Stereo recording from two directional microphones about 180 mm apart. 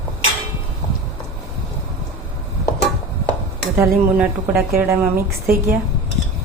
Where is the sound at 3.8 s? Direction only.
10° right (ahead or behind).